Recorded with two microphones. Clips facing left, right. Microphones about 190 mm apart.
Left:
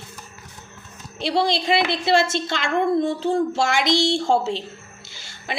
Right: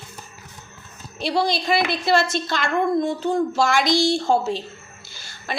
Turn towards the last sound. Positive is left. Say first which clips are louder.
# even
turn(degrees=20)  # may be behind; listen again after turning